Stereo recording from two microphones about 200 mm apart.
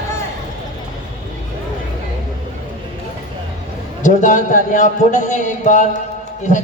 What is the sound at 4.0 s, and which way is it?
A man's voice, 40° left (ahead or behind).